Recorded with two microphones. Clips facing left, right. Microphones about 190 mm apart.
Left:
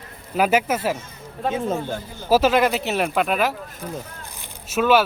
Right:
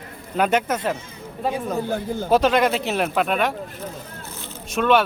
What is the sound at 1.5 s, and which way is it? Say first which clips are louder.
Speech: left 4 dB; 25° left (ahead or behind).